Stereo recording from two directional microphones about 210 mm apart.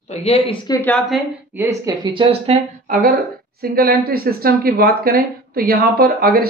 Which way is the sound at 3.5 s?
45° right (ahead or behind).